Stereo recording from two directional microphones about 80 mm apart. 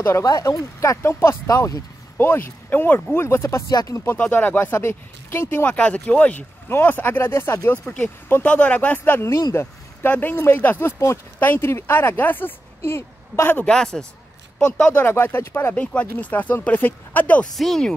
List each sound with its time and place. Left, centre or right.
0.0 s speech: left
2.1 s speech: left
4.3 s speech: left
4.7 s speech: left
7.8 s speech: centre
9.3 s speech: left
11.3 s speech: left
13.7 s speech: centre
14.8 s speech: left
15.7 s speech: centre
17.6 s speech: centre